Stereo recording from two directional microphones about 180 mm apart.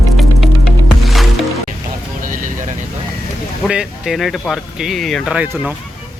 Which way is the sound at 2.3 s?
45° right (ahead or behind).